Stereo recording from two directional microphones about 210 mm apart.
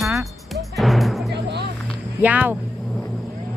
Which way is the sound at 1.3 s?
55° right (ahead or behind).